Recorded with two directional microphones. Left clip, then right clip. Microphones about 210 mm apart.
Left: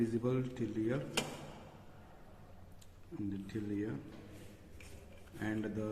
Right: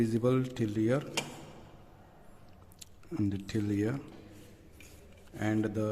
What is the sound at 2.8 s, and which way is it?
Speech, 55° right (ahead or behind).